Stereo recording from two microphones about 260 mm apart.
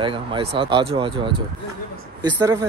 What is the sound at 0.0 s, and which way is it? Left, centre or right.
Speech, centre.